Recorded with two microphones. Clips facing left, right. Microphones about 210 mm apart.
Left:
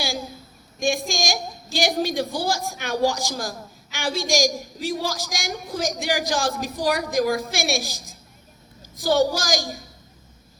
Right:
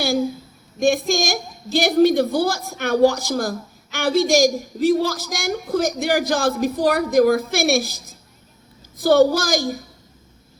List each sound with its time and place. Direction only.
0.8 s a woman's voice: 60° right (ahead or behind)
9.0 s a woman's voice: 55° right (ahead or behind)